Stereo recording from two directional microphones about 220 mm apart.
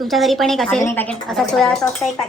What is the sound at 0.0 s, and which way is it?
Speech, centre (ahead or behind).